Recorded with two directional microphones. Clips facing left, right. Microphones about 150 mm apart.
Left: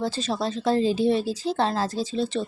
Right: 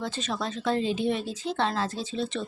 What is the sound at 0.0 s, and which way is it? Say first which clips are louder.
Speech: left 5 dB; 35° left (ahead or behind).